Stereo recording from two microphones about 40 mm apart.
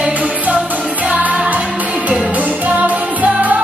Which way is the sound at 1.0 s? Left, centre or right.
Right.